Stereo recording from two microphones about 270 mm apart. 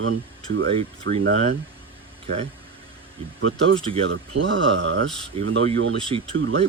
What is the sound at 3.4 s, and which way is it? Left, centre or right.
Speech, right.